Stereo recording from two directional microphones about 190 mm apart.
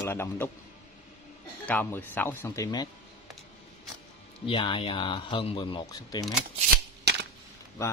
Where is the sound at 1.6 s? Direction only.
10° left (ahead or behind).